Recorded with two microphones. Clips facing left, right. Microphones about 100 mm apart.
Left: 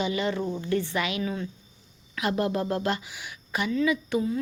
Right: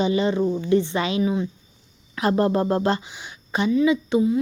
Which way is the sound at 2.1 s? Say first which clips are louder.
Right 6 dB; 35° right (ahead or behind).